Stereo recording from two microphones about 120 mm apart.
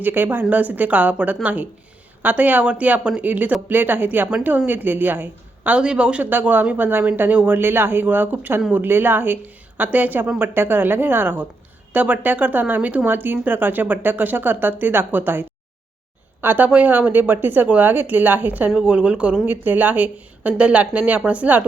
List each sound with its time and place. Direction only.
0.0 s a woman's voice: 15° right (ahead or behind)